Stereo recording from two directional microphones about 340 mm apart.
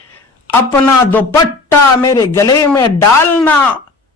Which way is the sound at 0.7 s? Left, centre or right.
Centre.